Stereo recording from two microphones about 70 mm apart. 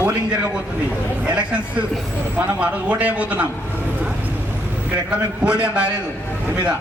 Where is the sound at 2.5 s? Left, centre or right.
Right.